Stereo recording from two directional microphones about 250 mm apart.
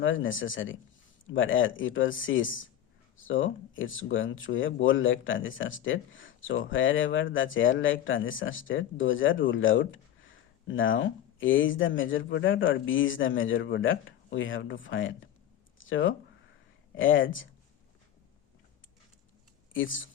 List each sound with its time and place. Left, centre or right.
0.0 s speech: left
19.7 s speech: left